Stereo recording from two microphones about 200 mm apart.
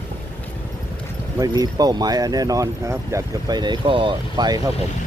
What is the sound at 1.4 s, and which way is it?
Speech, 20° right (ahead or behind).